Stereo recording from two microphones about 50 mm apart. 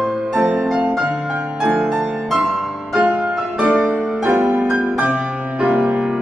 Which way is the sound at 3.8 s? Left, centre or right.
Centre.